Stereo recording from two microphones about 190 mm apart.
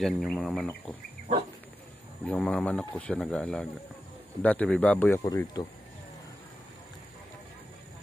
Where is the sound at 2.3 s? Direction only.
5° left (ahead or behind).